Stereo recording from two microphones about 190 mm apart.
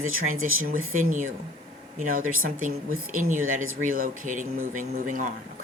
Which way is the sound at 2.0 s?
50° right (ahead or behind).